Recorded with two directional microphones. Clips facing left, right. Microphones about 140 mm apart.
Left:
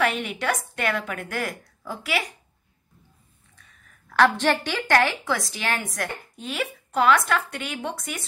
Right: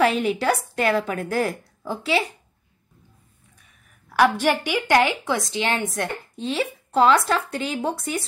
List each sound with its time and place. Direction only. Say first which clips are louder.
0.0 s a woman's voice: right 5 dB; 35° right (ahead or behind)
4.1 s a woman's voice: right 1 dB; 10° right (ahead or behind); by 8.3 s 30° right (ahead or behind)